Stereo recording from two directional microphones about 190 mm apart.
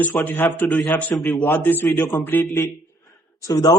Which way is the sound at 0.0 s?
10° left (ahead or behind).